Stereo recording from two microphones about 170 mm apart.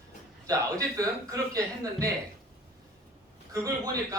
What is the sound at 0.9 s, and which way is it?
Speech, 20° right (ahead or behind).